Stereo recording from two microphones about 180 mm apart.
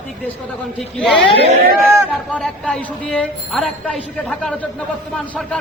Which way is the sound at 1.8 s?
15° right (ahead or behind).